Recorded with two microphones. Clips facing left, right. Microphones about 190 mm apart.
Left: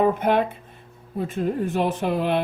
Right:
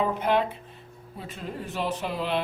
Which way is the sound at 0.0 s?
50° left (ahead or behind).